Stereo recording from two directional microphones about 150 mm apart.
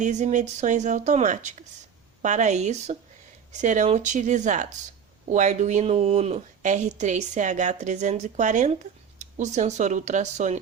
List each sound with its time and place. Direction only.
0.0 s a woman's voice: 50° right (ahead or behind)